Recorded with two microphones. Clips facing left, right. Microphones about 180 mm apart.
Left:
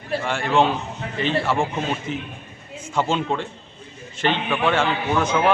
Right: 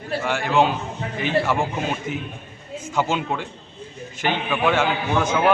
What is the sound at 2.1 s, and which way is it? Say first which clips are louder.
A man's voice: even; 5° right (ahead or behind).